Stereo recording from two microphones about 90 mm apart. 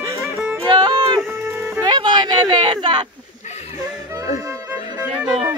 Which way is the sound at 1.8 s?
55° right (ahead or behind).